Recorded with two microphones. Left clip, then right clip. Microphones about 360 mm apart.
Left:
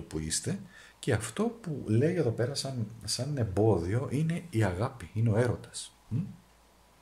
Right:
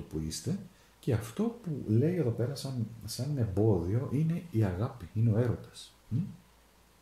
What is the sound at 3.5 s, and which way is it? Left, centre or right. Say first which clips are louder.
Speech: left 3 dB; left.